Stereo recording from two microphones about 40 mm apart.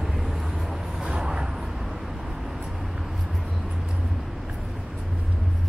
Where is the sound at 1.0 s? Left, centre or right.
Right.